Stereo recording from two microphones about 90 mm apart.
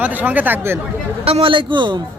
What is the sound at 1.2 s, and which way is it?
Speech, 90° right.